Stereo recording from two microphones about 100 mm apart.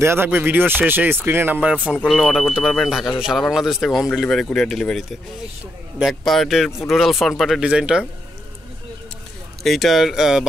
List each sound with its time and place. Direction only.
0.0 s speech: 25° right (ahead or behind)
9.6 s speech: centre (ahead or behind)